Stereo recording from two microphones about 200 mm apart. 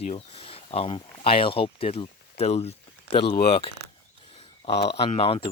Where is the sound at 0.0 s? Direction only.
30° left (ahead or behind).